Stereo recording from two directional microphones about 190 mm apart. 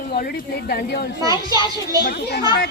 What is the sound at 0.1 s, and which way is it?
Speech, 45° left (ahead or behind).